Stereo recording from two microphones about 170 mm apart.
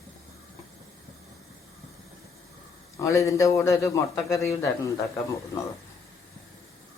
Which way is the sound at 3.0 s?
20° left (ahead or behind).